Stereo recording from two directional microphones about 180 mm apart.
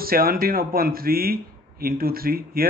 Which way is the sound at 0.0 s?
55° right (ahead or behind).